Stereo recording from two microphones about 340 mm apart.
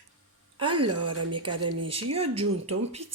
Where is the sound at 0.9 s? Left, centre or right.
Right.